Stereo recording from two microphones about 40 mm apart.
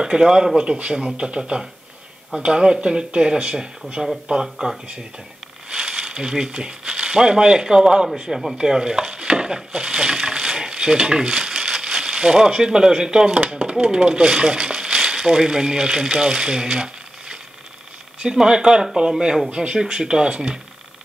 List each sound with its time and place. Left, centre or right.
0.0 s speech: centre
4.0 s speech: centre
4.3 s speech: centre
5.7 s speech: centre
8.3 s speech: centre
8.5 s stir: centre
9.8 s speech: centre
19.5 s speech: right